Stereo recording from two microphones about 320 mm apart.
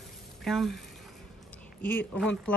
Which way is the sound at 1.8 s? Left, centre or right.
Centre.